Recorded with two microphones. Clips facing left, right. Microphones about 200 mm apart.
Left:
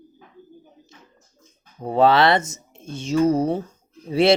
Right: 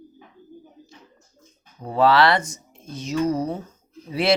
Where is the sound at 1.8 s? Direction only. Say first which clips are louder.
Left 1 dB; 25° left (ahead or behind).